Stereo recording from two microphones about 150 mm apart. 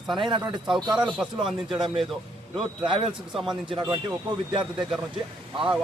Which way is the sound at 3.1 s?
5° right (ahead or behind).